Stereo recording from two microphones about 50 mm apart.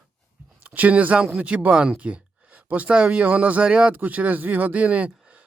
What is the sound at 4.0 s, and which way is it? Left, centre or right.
Speech, right.